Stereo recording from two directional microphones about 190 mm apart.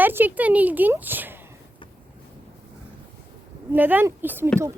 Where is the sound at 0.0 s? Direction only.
10° right (ahead or behind).